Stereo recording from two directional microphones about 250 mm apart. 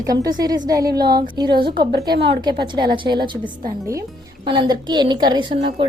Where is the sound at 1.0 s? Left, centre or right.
Right.